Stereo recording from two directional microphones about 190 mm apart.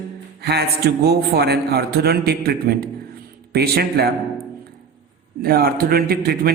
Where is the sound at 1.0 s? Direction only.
55° right (ahead or behind).